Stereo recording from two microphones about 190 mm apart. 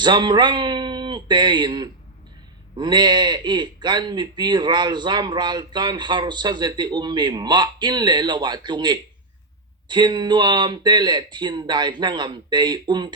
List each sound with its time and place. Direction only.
0.0 s a man's voice: 25° right (ahead or behind)